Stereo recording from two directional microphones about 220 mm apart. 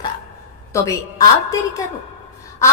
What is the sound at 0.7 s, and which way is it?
Speech, 15° left (ahead or behind).